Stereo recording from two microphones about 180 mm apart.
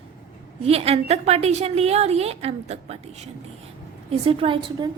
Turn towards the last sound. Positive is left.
turn(degrees=-25)  # may be behind; listen again after turning